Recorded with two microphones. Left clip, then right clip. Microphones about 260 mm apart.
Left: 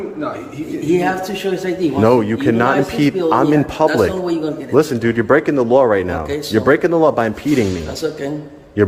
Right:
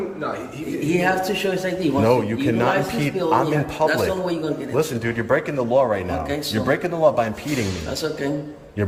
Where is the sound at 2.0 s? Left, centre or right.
Centre.